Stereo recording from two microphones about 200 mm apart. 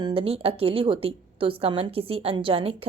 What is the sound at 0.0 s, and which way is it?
A woman's voice, 30° right (ahead or behind).